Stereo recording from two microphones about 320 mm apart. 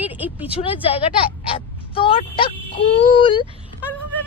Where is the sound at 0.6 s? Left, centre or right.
Centre.